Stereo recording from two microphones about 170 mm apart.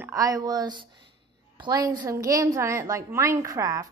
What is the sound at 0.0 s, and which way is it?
A woman's voice, 20° right (ahead or behind).